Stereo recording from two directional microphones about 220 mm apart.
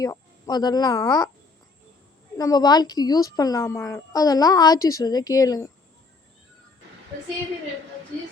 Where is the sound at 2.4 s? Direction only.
15° left (ahead or behind).